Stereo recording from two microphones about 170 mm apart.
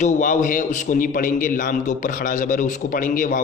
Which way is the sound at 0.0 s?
50° left (ahead or behind).